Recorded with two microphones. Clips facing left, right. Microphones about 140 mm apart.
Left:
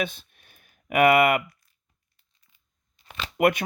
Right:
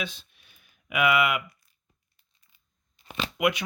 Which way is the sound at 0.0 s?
50° left (ahead or behind).